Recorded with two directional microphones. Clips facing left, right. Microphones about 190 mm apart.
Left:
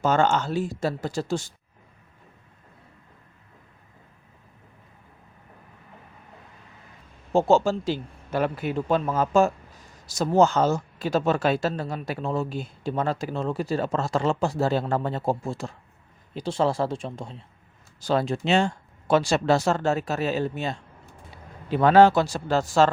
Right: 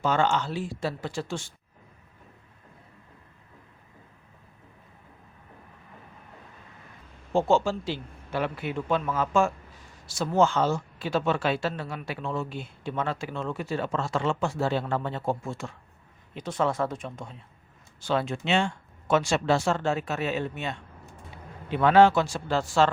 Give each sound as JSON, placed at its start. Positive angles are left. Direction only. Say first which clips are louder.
{"t": 0.0, "sound": "speech", "louder": "left 3 dB", "side_deg": 45}
{"t": 7.3, "sound": "speech", "louder": "left 3 dB", "side_deg": 40}